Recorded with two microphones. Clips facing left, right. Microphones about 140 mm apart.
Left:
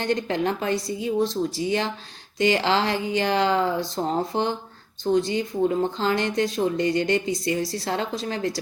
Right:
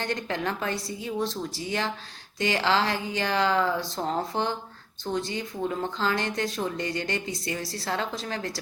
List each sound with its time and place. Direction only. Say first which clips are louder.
0.0 s speech: left 6 dB; 20° left (ahead or behind)